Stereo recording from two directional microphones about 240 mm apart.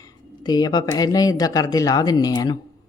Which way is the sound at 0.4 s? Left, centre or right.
Centre.